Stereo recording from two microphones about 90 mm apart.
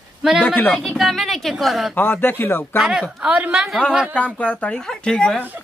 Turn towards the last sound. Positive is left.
turn(degrees=10)  # may be behind; listen again after turning